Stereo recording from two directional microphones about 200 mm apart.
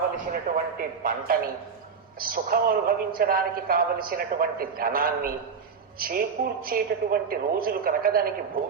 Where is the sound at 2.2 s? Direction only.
45° right (ahead or behind).